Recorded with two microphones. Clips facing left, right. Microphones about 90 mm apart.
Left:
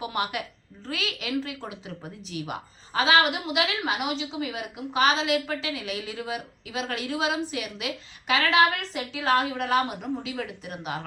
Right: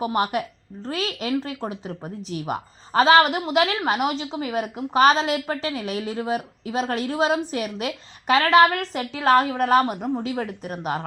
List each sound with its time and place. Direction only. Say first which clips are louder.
0.0 s a woman's voice: right 7 dB; 40° right (ahead or behind)